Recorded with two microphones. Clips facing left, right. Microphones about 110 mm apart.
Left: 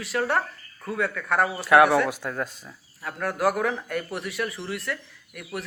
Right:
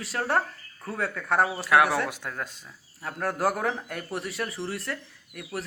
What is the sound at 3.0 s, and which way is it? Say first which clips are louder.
A man's voice: left 2 dB; 35° right (ahead or behind).